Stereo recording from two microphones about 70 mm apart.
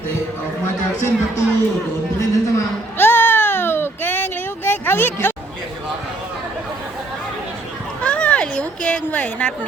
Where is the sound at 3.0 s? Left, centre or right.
Left.